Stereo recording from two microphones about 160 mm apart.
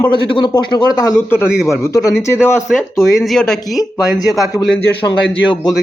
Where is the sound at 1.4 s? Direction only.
5° right (ahead or behind).